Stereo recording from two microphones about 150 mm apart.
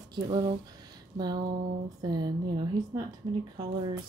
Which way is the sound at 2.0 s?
25° right (ahead or behind).